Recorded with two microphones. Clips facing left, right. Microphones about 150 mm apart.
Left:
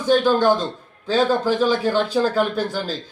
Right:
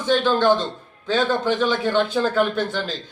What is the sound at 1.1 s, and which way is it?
Speech, 35° left (ahead or behind).